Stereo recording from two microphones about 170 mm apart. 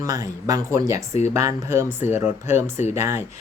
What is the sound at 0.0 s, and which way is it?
Speech, 20° right (ahead or behind).